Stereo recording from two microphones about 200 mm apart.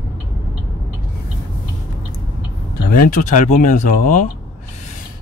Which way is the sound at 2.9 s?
40° left (ahead or behind).